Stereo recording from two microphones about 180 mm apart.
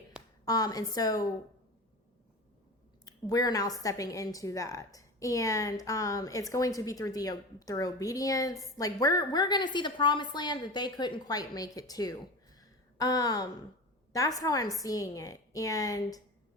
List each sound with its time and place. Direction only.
0.4 s a woman's voice: 20° left (ahead or behind)
3.0 s a woman's voice: 20° left (ahead or behind)